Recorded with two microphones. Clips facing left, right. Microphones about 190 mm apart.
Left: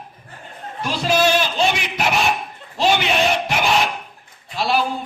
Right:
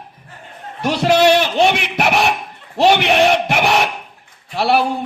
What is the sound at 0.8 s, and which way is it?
A man's voice, 70° right (ahead or behind).